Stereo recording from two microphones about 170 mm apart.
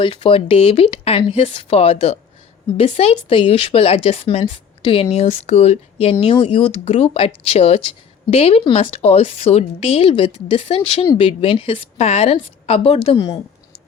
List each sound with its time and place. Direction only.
0.0 s speech: 35° left (ahead or behind)